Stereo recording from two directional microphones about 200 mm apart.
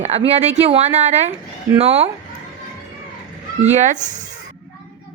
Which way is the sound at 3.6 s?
35° right (ahead or behind).